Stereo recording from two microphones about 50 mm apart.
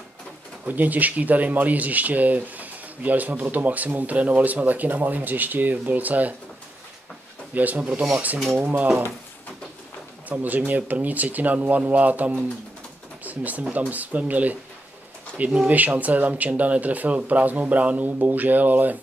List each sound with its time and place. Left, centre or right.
0.7 s speech: right
7.5 s speech: right
10.2 s speech: right